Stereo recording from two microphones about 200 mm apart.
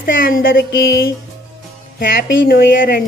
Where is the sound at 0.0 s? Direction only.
45° left (ahead or behind).